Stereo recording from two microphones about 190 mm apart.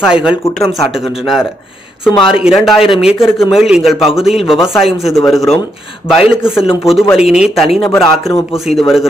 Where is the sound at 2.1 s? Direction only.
25° left (ahead or behind).